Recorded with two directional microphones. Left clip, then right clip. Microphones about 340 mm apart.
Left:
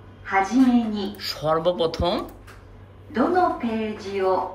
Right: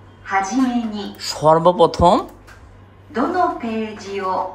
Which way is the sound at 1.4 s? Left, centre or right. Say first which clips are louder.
Right 9 dB; centre.